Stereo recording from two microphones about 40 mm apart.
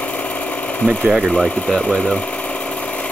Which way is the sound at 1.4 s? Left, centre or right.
Centre.